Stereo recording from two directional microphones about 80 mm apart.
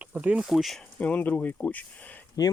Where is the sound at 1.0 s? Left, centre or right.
Centre.